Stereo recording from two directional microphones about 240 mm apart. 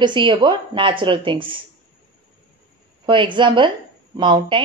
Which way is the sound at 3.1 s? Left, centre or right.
Centre.